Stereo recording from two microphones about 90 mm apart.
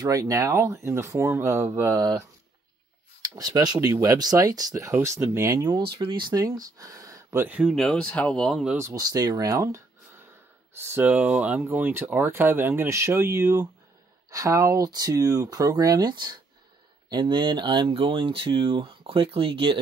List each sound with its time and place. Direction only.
0.0 s speech: 40° right (ahead or behind)
3.3 s speech: 45° right (ahead or behind)
4.9 s speech: 30° right (ahead or behind)
5.5 s speech: 45° right (ahead or behind)
6.0 s speech: 60° right (ahead or behind); by 7.3 s 40° right (ahead or behind)
7.3 s speech: 20° right (ahead or behind)
7.8 s speech: 10° left (ahead or behind)
8.9 s speech: 45° right (ahead or behind)
10.8 s speech: 25° right (ahead or behind); by 19.8 s 85° right